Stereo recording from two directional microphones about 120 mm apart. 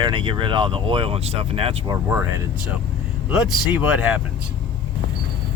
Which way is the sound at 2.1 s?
25° right (ahead or behind).